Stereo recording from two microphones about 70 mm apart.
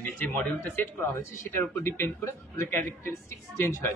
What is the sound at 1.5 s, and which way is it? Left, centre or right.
A man's voice, left.